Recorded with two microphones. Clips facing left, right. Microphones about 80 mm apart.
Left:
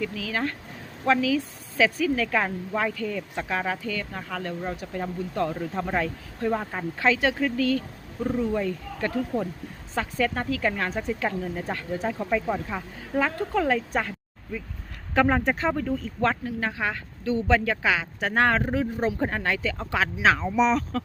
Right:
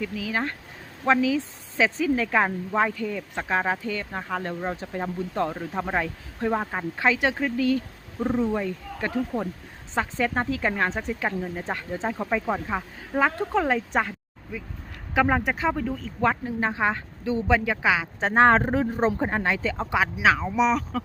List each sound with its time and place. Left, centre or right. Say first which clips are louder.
0.0 s a woman's voice: even; centre
15.1 s a woman's voice: left 1 dB; centre
16.4 s a woman's voice: right 3 dB; right
18.2 s speech: right 6 dB; right
19.2 s speech: right 1 dB; centre
20.2 s speech: left 1 dB; centre